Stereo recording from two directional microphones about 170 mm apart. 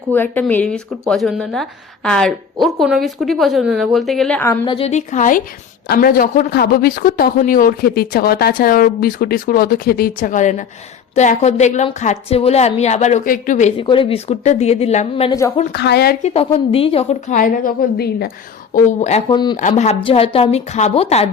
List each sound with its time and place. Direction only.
0.1 s a woman's voice: 10° left (ahead or behind)
4.6 s a woman's voice: 30° left (ahead or behind)
4.9 s a woman's voice: 45° left (ahead or behind)
13.7 s a woman's voice: 30° left (ahead or behind)
15.3 s a woman's voice: 20° left (ahead or behind)
15.7 s a woman's voice: 75° left (ahead or behind)
16.2 s a woman's voice: 35° left (ahead or behind); by 18.3 s 70° left (ahead or behind)
18.7 s a woman's voice: 45° left (ahead or behind)
19.3 s a woman's voice: 25° left (ahead or behind)
19.5 s a woman's voice: 45° left (ahead or behind)